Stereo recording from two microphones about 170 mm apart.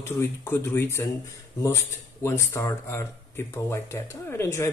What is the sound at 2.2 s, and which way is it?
Speech, 15° left (ahead or behind).